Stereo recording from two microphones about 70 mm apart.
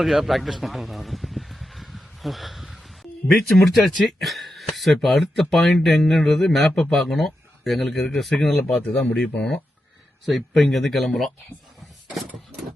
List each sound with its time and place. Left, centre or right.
0.0 s a sound: centre
3.2 s speech: centre
8.6 s speech: centre
10.2 s speech: centre